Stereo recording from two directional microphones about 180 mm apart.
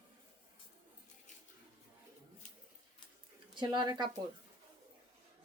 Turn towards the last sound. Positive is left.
turn(degrees=-25)  # may be behind; listen again after turning